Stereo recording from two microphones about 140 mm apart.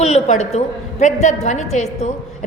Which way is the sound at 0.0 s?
50° left (ahead or behind).